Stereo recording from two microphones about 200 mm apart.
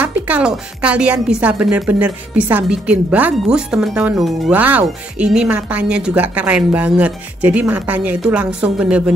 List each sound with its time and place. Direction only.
0.0 s a woman's voice: 5° right (ahead or behind)